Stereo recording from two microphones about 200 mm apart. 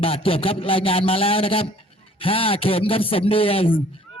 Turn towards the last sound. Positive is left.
turn(degrees=30)  # may be behind; listen again after turning